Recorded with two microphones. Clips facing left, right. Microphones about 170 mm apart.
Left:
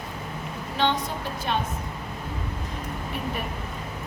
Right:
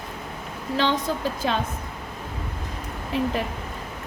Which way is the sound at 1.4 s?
90° right.